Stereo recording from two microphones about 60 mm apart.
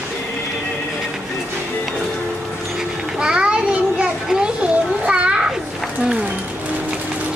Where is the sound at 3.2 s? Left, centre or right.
Centre.